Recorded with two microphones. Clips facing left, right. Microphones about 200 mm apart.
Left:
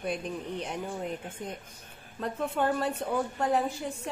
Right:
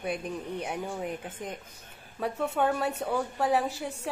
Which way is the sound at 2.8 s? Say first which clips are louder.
Even; 5° right (ahead or behind).